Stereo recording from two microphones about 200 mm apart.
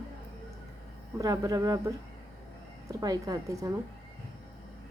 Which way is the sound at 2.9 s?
20° right (ahead or behind).